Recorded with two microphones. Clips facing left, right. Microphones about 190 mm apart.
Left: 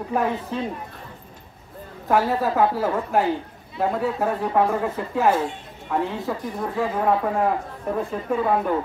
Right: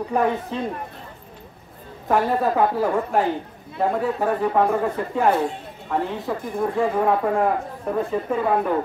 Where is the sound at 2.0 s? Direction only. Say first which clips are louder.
Right 1 dB; centre (ahead or behind).